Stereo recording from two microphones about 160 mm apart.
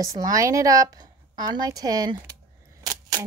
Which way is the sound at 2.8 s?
20° right (ahead or behind).